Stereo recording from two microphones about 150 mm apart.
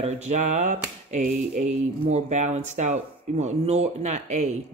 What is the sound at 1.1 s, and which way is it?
Speech, 55° right (ahead or behind).